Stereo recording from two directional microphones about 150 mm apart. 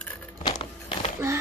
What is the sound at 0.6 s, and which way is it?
Walk, 35° left (ahead or behind).